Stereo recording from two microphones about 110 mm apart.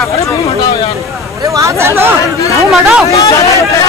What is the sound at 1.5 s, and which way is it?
Hubbub, 25° right (ahead or behind).